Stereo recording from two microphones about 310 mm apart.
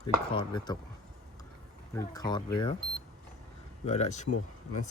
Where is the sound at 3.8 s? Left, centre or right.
Left.